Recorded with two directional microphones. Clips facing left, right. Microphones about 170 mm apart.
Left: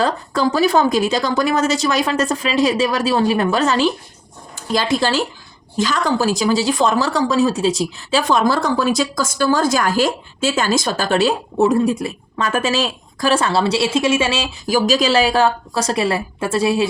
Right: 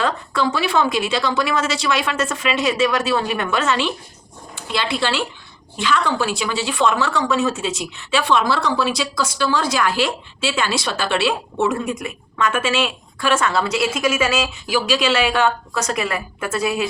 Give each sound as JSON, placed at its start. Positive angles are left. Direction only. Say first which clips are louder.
{"t": 0.0, "sound": "speech", "louder": "left 3 dB", "side_deg": 40}
{"t": 14.7, "sound": "speech", "louder": "left 4 dB", "side_deg": 40}